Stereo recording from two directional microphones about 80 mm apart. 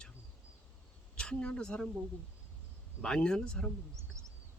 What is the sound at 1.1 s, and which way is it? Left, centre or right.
Speech, centre.